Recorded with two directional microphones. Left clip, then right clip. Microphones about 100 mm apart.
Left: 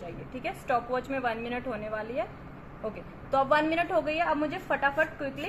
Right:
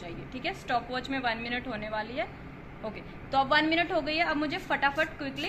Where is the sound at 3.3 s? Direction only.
75° left (ahead or behind); by 5.4 s 55° left (ahead or behind).